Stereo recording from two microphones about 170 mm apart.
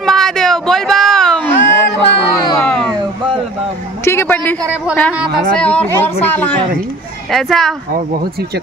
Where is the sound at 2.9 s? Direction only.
30° right (ahead or behind).